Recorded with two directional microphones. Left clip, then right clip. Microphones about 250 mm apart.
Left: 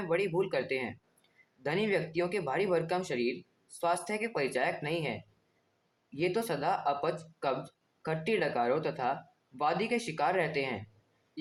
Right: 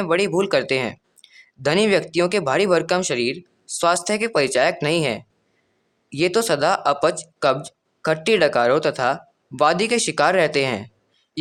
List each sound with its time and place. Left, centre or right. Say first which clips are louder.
0.0 s speech: right 11 dB; right